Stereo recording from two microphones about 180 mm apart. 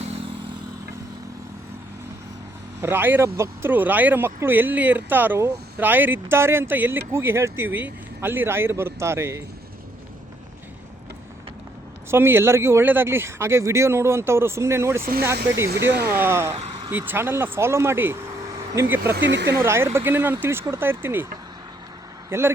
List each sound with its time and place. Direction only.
2.8 s speech: 10° right (ahead or behind)
12.1 s speech: 15° right (ahead or behind)
15.7 s speech: 65° right (ahead or behind)
16.1 s speech: 15° right (ahead or behind)
19.1 s speech: 75° right (ahead or behind)
19.6 s speech: 15° right (ahead or behind)
22.3 s speech: 15° right (ahead or behind)